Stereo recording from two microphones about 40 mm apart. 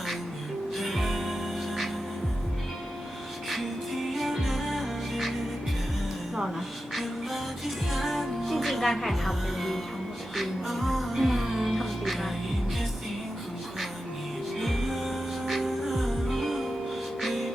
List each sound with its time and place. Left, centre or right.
0.8 s music: centre
4.1 s music: centre
6.9 s music: centre
14.6 s music: centre